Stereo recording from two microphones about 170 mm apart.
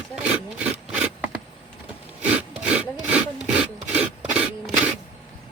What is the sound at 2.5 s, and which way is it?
Rub, 5° right (ahead or behind).